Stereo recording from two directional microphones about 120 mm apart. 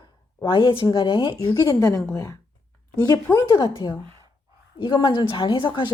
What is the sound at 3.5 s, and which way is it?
A woman's voice, 45° left (ahead or behind).